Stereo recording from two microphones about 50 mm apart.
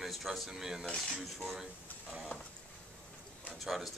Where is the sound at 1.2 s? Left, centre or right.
Centre.